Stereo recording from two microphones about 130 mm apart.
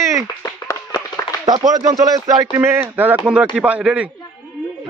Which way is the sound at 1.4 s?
30° right (ahead or behind).